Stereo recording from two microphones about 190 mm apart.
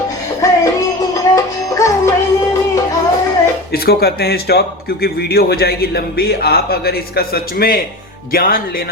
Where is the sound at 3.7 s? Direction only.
55° left (ahead or behind).